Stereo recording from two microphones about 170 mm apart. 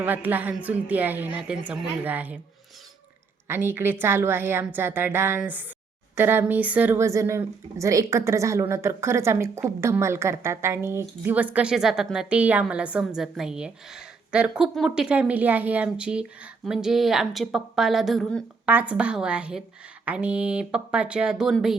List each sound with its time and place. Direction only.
0.0 s a woman's voice: 10° right (ahead or behind)
3.4 s a woman's voice: 10° right (ahead or behind)
18.6 s a woman's voice: 10° right (ahead or behind)